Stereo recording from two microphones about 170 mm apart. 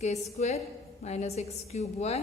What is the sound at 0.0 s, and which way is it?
A woman's voice, 40° left (ahead or behind).